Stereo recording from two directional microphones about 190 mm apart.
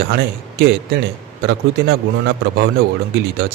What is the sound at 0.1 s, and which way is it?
Speech, 55° right (ahead or behind).